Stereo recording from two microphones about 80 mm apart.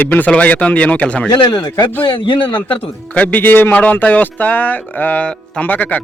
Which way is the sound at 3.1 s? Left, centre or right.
Centre.